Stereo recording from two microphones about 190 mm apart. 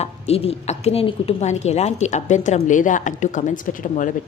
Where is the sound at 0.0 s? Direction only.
30° left (ahead or behind).